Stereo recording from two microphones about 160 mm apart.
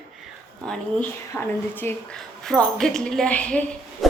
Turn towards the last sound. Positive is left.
turn(degrees=10)  # may be behind; listen again after turning